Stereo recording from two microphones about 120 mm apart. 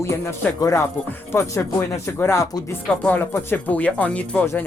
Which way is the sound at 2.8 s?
10° left (ahead or behind).